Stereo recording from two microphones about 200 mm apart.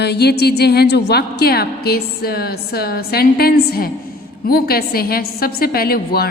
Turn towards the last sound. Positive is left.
turn(degrees=50)  # may be behind; listen again after turning